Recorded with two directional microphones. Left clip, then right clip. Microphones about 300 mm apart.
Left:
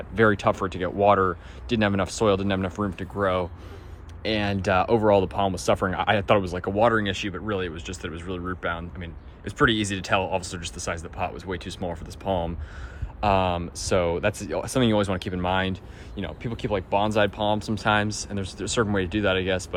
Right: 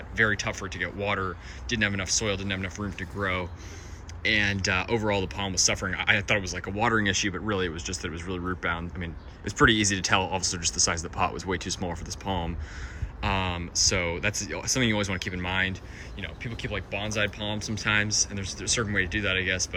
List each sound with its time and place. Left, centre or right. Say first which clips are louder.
0.2 s speech: left 5 dB; centre